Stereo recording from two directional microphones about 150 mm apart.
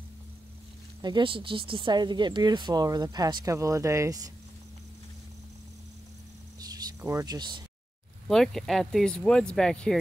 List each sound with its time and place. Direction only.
1.0 s speech: 30° right (ahead or behind)
6.6 s a sound: 25° right (ahead or behind)
8.3 s speech: centre (ahead or behind)